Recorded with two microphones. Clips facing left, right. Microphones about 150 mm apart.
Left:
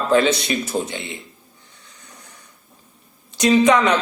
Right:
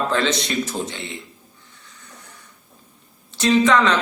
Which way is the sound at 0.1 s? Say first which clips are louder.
Left 5 dB; 10° left (ahead or behind).